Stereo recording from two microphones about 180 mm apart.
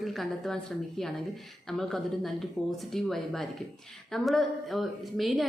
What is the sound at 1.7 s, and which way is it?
A woman's voice, centre (ahead or behind).